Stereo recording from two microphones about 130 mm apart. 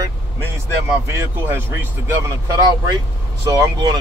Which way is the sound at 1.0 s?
20° right (ahead or behind).